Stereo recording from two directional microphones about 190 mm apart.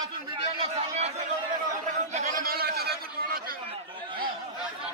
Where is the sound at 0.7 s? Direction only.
35° right (ahead or behind).